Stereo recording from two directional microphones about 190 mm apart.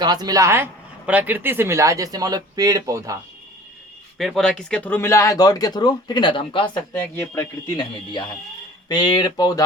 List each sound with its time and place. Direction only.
0.0 s a man's voice: 20° right (ahead or behind)
4.2 s speech: centre (ahead or behind); by 6.7 s 25° left (ahead or behind)
6.7 s speech: 15° left (ahead or behind)
8.9 s speech: 20° left (ahead or behind)